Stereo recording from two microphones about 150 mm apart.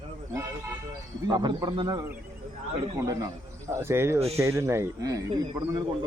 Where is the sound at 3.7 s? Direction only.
15° right (ahead or behind).